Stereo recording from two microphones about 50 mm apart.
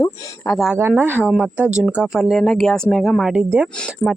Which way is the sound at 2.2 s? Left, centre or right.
Centre.